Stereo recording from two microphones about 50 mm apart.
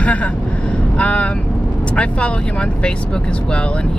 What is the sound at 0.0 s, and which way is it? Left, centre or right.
Speech, left.